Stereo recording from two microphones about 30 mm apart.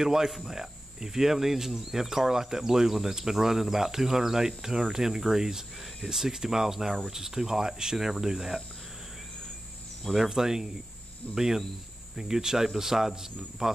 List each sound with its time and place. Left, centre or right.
0.0 s speech: centre
10.3 s speech: centre